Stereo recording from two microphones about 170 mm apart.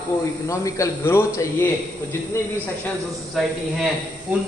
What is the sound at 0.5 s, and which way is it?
A man's voice, 15° left (ahead or behind).